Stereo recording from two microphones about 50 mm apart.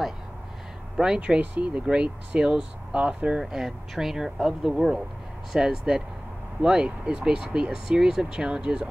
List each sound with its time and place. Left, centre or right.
0.9 s speech: centre
1.4 s speech: right
3.4 s speech: centre